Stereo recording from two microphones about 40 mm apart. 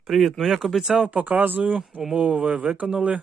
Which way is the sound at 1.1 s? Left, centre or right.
Right.